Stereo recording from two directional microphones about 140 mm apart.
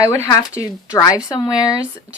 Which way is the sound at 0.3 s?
25° left (ahead or behind).